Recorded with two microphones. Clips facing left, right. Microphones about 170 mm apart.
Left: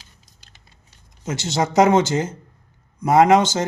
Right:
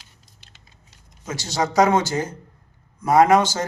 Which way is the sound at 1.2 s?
25° left (ahead or behind).